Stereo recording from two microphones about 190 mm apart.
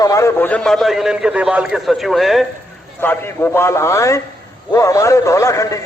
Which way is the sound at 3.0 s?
10° left (ahead or behind).